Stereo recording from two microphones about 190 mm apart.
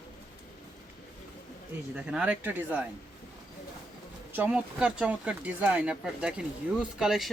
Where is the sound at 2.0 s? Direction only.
5° right (ahead or behind).